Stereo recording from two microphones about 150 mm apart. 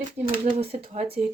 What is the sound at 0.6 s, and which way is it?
Speech, 40° right (ahead or behind).